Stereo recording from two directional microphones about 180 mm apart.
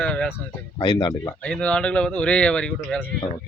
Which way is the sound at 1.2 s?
10° left (ahead or behind).